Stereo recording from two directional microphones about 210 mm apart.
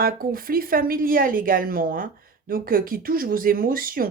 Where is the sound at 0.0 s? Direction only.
45° right (ahead or behind).